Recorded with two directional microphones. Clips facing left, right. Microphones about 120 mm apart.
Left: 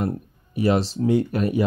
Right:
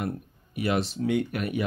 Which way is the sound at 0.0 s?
35° left (ahead or behind).